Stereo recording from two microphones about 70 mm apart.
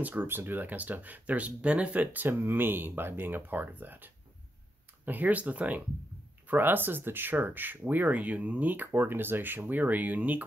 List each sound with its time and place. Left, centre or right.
0.0 s speech: right
2.2 s speech: right